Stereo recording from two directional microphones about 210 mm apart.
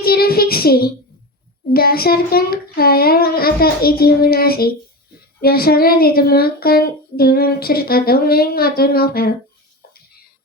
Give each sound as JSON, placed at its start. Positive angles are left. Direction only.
{"t": 0.0, "sound": "child singing", "side_deg": 45}
{"t": 1.7, "sound": "speech", "side_deg": 45}